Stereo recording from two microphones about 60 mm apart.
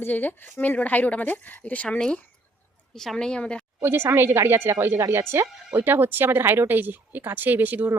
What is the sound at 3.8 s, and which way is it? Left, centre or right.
Speech, right.